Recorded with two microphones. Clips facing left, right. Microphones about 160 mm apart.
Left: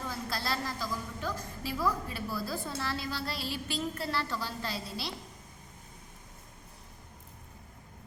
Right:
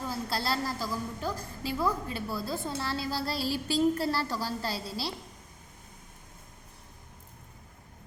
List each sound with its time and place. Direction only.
0.1 s a woman's voice: 30° right (ahead or behind)